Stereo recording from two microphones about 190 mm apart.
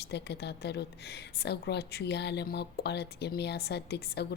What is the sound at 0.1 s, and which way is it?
Speech, 65° left (ahead or behind).